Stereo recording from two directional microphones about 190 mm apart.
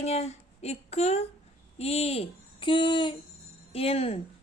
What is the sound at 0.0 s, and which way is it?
A woman's voice, 35° left (ahead or behind).